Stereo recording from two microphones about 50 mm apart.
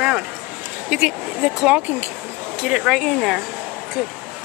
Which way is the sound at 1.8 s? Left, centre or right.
Right.